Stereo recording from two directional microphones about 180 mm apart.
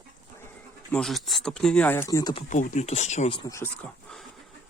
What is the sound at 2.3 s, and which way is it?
Speech, 45° left (ahead or behind).